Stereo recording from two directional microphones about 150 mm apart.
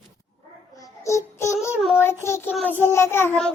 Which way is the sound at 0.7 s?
20° left (ahead or behind).